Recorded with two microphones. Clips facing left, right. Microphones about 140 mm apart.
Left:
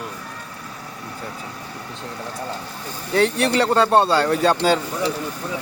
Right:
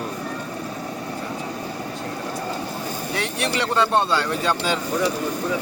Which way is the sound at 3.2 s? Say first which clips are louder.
Left 8 dB; 35° left (ahead or behind).